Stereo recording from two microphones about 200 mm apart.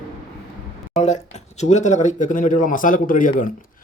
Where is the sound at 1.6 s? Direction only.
35° left (ahead or behind).